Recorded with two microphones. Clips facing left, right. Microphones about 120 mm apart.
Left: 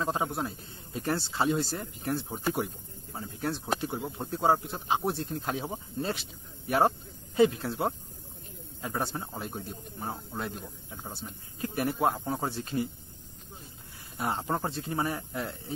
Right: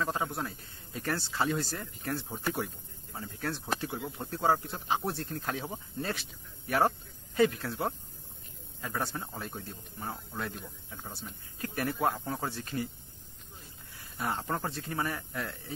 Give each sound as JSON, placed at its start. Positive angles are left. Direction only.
{"t": 0.0, "sound": "speech", "side_deg": 20}
{"t": 7.3, "sound": "speech", "side_deg": 20}
{"t": 14.1, "sound": "speech", "side_deg": 25}